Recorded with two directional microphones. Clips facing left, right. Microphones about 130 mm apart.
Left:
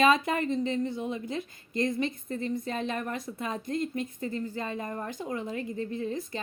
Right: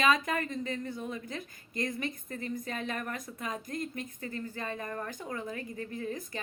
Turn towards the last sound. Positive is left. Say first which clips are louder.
# left 4 dB
turn(degrees=25)  # may be behind; listen again after turning